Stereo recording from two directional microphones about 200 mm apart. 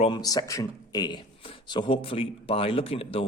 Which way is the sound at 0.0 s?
20° left (ahead or behind).